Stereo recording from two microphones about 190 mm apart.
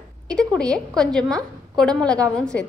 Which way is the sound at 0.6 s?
5° left (ahead or behind).